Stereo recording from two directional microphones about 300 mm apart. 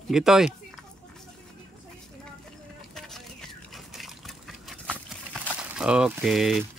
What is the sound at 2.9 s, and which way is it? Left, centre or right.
Liquid, centre.